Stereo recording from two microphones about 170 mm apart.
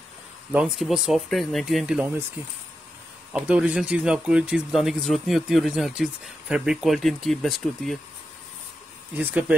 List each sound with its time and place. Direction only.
0.5 s speech: 5° right (ahead or behind)
2.4 s speech: 15° right (ahead or behind); by 8.0 s centre (ahead or behind)
9.1 s speech: 10° right (ahead or behind)